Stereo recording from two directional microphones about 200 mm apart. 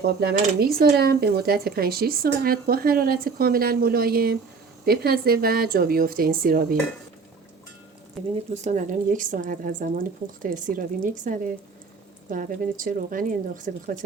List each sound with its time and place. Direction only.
0.0 s speech: 55° right (ahead or behind)
8.2 s speech: centre (ahead or behind)
8.6 s a woman's voice: 40° right (ahead or behind)